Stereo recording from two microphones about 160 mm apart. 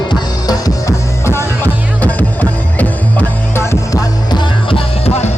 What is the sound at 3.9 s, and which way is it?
Music, 30° left (ahead or behind).